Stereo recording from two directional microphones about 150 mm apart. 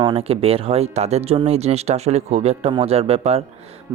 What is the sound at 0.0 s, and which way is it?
Speech, 40° right (ahead or behind).